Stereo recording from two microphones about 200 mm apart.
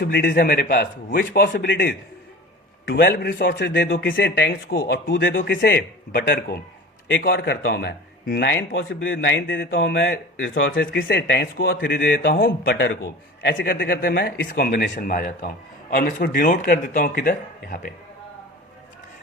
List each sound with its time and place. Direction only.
0.0 s speech: 55° left (ahead or behind)
5.5 s speech: 50° left (ahead or behind); by 10.7 s 70° left (ahead or behind)
10.7 s speech: 45° left (ahead or behind)
13.7 s speech: 45° left (ahead or behind)